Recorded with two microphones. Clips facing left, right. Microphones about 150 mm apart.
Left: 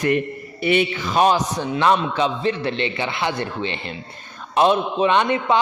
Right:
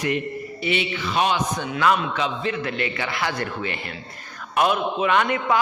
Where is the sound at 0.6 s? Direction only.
50° left (ahead or behind).